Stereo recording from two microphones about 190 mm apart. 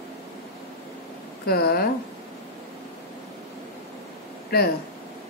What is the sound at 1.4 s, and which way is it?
Speech, 55° left (ahead or behind).